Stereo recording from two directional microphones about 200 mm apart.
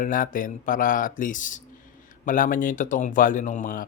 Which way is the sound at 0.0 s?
45° left (ahead or behind).